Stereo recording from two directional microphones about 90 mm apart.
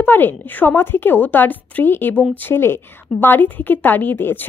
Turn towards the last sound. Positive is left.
turn(degrees=25)  # may be behind; listen again after turning